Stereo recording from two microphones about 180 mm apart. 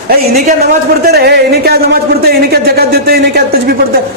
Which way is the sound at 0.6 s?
60° right (ahead or behind).